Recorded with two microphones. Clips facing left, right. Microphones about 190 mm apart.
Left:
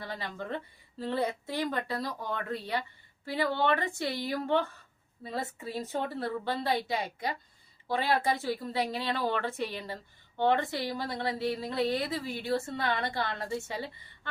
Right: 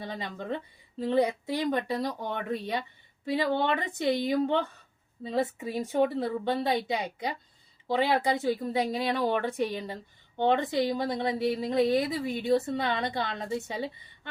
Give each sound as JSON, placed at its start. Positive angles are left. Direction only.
{"t": 0.0, "sound": "a woman's voice", "side_deg": -20}